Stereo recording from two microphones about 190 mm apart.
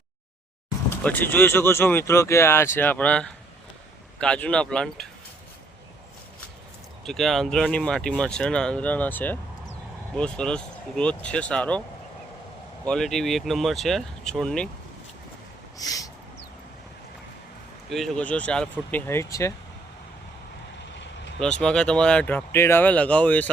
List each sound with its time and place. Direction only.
1.0 s speech: 10° left (ahead or behind)
7.0 s speech: centre (ahead or behind)
12.8 s speech: 5° left (ahead or behind)
15.8 s a sound: 20° left (ahead or behind)
17.8 s speech: centre (ahead or behind)
20.9 s vehicle: 70° left (ahead or behind)
21.3 s speech: 5° left (ahead or behind)